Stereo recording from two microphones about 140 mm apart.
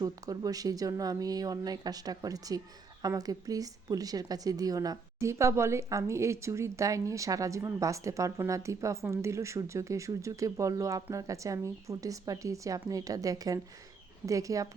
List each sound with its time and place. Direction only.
0.0 s speech: 25° right (ahead or behind)